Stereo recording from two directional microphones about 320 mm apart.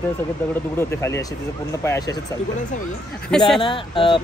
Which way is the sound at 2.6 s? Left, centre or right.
Left.